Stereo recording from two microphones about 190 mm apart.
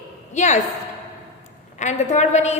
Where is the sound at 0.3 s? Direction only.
40° left (ahead or behind).